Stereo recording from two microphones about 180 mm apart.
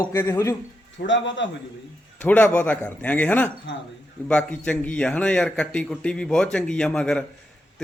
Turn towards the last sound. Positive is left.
turn(degrees=5)  # may be behind; listen again after turning